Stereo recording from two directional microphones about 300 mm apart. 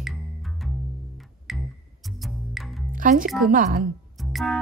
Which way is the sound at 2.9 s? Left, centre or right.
Right.